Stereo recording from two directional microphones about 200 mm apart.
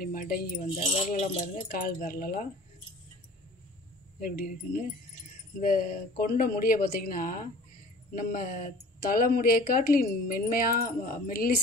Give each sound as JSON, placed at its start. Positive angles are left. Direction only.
{"t": 0.0, "sound": "speech", "side_deg": 45}
{"t": 0.7, "sound": "speech", "side_deg": 30}
{"t": 1.7, "sound": "speech", "side_deg": 45}
{"t": 4.2, "sound": "speech", "side_deg": 50}